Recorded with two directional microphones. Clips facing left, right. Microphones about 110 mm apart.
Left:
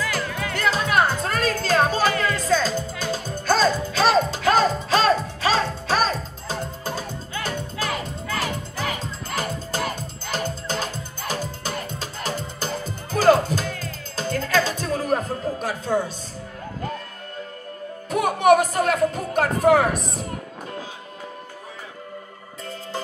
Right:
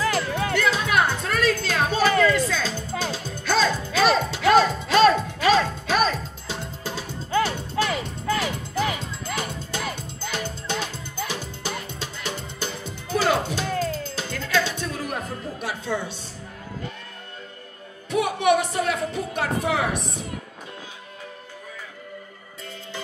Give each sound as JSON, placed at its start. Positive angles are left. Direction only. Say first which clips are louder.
{"t": 0.3, "sound": "music", "louder": "right 4 dB", "side_deg": -35}
{"t": 0.6, "sound": "music", "louder": "left 2 dB", "side_deg": 40}
{"t": 18.1, "sound": "a sound", "louder": "left 4 dB", "side_deg": 45}